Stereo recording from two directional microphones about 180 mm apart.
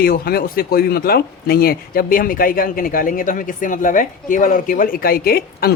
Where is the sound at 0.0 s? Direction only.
55° left (ahead or behind).